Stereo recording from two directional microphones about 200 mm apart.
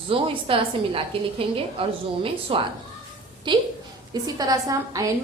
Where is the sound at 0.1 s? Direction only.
25° right (ahead or behind).